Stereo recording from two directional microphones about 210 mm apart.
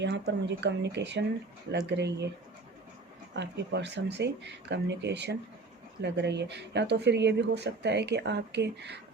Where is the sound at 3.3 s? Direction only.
55° right (ahead or behind).